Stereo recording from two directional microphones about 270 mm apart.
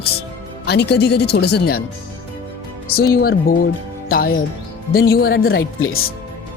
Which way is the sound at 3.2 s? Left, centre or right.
Left.